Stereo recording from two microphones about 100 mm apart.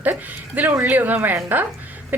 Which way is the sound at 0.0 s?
20° right (ahead or behind).